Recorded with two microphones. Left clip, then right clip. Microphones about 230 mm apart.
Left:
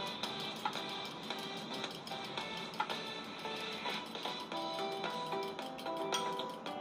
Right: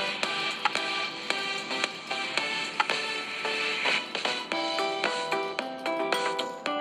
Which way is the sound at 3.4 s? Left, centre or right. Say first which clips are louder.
Right 13 dB; right.